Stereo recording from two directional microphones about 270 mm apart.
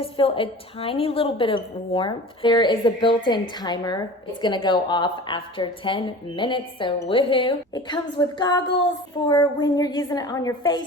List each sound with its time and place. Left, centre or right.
0.0 s a woman's voice: centre